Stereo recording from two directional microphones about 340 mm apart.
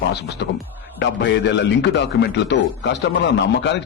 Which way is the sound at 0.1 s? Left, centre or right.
Left.